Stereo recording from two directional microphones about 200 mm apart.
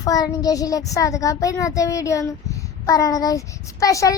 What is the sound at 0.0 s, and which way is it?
A child's voice, 15° left (ahead or behind).